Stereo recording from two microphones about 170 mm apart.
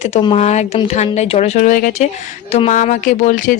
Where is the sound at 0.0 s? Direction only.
30° left (ahead or behind).